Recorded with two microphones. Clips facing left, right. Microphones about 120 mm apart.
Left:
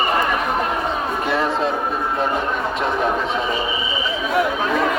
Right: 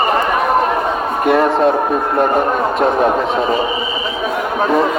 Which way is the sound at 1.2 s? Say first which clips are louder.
Right 10 dB; 55° right (ahead or behind).